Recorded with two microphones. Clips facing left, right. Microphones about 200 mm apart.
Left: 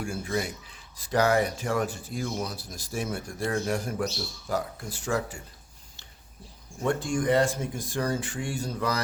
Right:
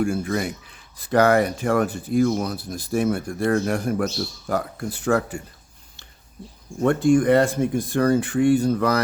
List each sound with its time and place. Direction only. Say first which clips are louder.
0.0 s speech: right 7 dB; 60° right (ahead or behind)
6.8 s speech: right 9 dB; 60° right (ahead or behind)